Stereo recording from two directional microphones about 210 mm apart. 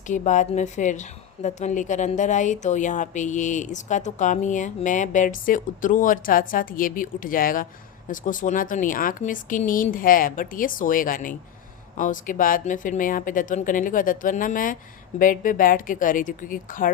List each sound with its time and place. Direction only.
0.1 s a woman's voice: 35° left (ahead or behind)